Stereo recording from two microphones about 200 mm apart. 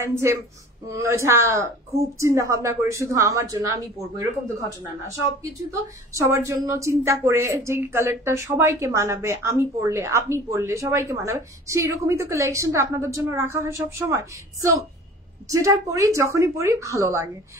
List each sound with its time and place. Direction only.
0.0 s a woman's voice: 15° right (ahead or behind)